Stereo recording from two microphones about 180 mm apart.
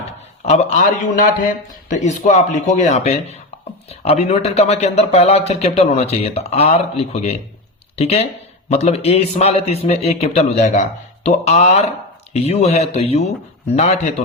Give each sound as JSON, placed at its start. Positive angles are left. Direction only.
{"t": 0.4, "sound": "speech", "side_deg": 40}